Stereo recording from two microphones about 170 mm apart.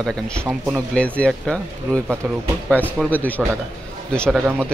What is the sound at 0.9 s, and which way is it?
Speech, 5° left (ahead or behind).